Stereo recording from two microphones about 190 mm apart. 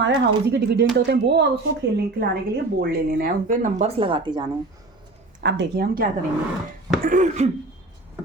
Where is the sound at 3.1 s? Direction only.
50° right (ahead or behind); by 4.4 s 25° right (ahead or behind).